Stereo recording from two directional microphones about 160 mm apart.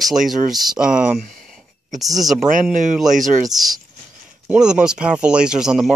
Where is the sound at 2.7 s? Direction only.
55° right (ahead or behind).